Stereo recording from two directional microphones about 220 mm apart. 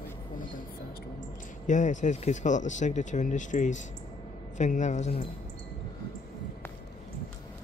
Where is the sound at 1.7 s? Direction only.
35° left (ahead or behind).